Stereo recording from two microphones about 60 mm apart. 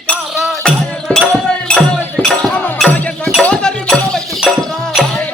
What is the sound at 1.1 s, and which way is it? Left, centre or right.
Music, left.